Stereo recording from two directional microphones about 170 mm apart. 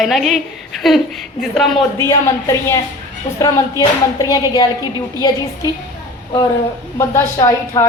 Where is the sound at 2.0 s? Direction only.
20° left (ahead or behind).